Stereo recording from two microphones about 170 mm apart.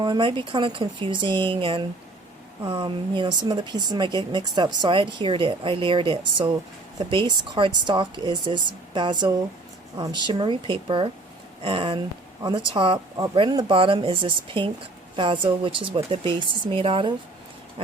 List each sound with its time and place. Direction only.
0.0 s speech: 30° right (ahead or behind)